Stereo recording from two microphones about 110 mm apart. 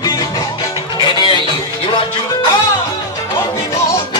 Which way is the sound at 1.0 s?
50° left (ahead or behind).